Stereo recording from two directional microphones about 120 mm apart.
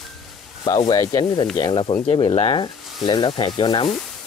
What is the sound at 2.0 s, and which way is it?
Speech, 50° left (ahead or behind).